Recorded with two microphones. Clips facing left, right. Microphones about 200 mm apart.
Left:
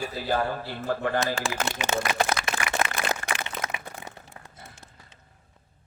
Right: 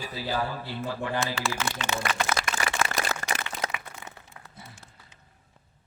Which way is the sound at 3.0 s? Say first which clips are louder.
Left 1 dB; 40° right (ahead or behind).